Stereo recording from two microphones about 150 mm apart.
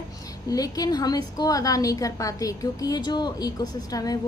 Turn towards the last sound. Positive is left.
turn(degrees=25)  # may be behind; listen again after turning